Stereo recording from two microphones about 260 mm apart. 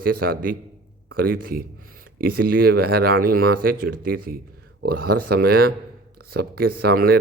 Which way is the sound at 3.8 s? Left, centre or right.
Right.